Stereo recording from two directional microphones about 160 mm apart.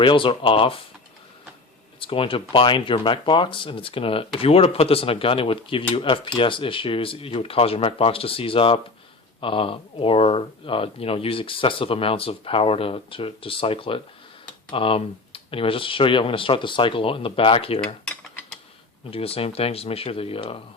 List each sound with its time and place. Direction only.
0.0 s speech: 30° left (ahead or behind)
2.0 s speech: 35° left (ahead or behind)
17.7 s cutlery: 5° left (ahead or behind)
19.1 s speech: 35° left (ahead or behind)